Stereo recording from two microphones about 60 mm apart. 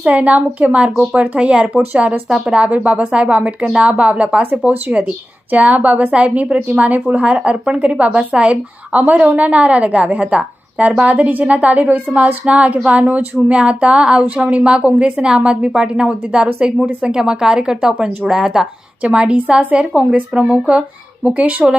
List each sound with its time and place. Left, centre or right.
0.0 s a woman's voice: right